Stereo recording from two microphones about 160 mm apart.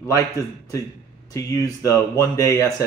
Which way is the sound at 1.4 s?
20° left (ahead or behind).